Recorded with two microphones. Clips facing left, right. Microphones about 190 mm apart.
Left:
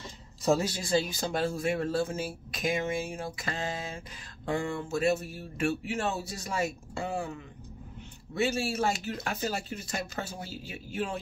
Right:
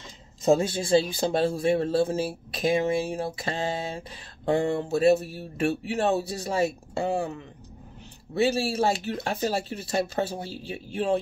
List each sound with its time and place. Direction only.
0.4 s speech: 25° right (ahead or behind)
8.4 s speech: 30° right (ahead or behind)